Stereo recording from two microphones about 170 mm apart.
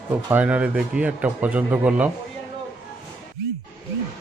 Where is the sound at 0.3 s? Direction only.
10° right (ahead or behind).